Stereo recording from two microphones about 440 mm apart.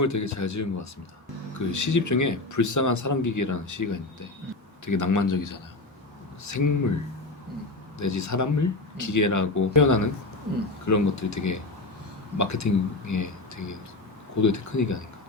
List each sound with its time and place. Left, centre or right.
0.0 s speech: left
7.9 s speech: left